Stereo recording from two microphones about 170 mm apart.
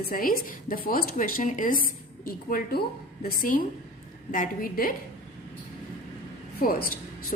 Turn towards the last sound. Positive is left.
turn(degrees=60)  # may be behind; listen again after turning